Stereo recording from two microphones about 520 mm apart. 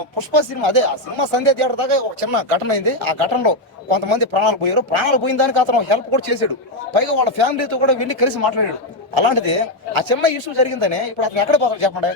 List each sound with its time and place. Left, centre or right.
0.2 s speech: right